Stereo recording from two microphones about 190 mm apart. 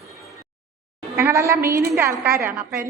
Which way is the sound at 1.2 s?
15° right (ahead or behind).